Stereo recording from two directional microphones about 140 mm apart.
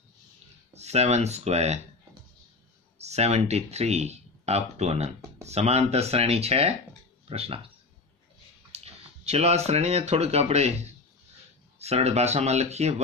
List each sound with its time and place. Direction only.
0.7 s speech: 50° right (ahead or behind)
3.0 s speech: 50° right (ahead or behind)
8.7 s speech: 50° right (ahead or behind)